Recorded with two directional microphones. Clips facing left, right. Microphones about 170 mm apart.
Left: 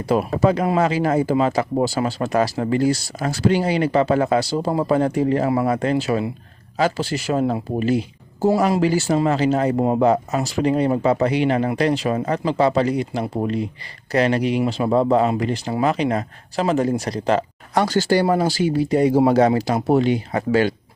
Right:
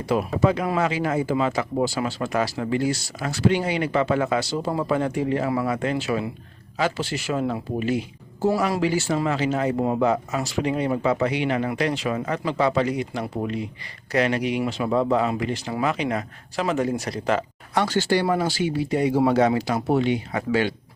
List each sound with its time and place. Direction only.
0.0 s speech: 40° left (ahead or behind)